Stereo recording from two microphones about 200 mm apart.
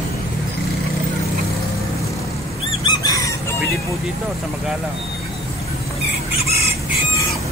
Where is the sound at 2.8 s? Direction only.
15° left (ahead or behind).